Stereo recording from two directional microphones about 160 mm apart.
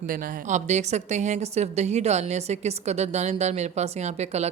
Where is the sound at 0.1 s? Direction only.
50° right (ahead or behind).